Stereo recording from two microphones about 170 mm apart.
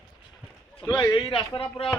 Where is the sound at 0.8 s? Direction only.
15° left (ahead or behind).